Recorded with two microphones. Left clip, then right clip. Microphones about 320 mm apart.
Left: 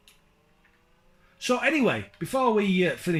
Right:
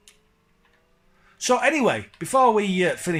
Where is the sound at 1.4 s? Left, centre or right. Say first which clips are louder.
Right 4 dB; centre.